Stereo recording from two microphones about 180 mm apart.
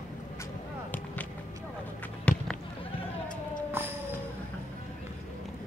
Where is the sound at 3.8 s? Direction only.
10° right (ahead or behind).